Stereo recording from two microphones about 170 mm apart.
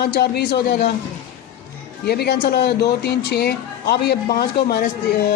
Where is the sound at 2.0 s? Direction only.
70° left (ahead or behind).